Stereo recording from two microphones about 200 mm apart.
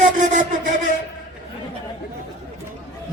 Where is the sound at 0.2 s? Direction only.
40° right (ahead or behind).